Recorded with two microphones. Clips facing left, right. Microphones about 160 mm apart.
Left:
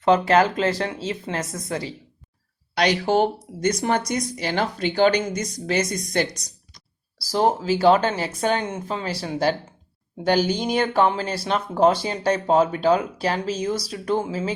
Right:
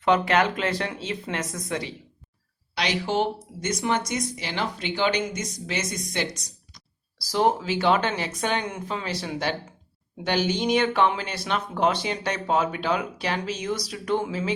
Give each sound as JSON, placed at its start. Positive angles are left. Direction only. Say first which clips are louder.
{"t": 0.0, "sound": "speech", "louder": "left 4 dB", "side_deg": 35}
{"t": 2.7, "sound": "speech", "louder": "left 5 dB", "side_deg": 45}
{"t": 7.3, "sound": "speech", "louder": "left 2 dB", "side_deg": 35}